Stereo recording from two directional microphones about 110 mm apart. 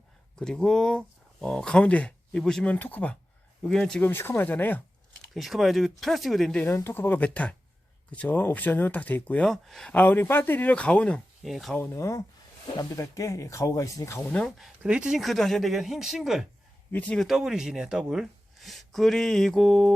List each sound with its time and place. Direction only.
0.3 s speech: 5° left (ahead or behind)
3.6 s speech: 5° left (ahead or behind)
4.1 s speech: 20° left (ahead or behind)
5.3 s speech: centre (ahead or behind)
6.7 s speech: 25° left (ahead or behind); by 9.9 s 5° left (ahead or behind)
9.9 s speech: 15° left (ahead or behind)
11.4 s speech: centre (ahead or behind)
11.8 s speech: 25° left (ahead or behind)
14.2 s speech: 10° left (ahead or behind)
14.8 s speech: 10° right (ahead or behind)
16.9 s speech: 10° left (ahead or behind)
17.2 s speech: 5° right (ahead or behind)